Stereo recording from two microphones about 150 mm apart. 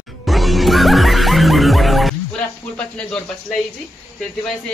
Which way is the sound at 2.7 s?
5° left (ahead or behind).